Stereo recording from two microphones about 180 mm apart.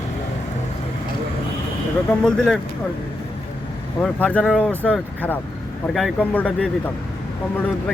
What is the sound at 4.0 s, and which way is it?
Speech, 5° left (ahead or behind).